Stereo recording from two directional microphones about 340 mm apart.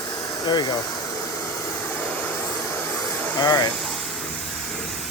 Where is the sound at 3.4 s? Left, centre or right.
Centre.